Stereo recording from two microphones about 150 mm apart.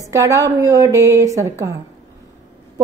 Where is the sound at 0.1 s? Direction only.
20° right (ahead or behind).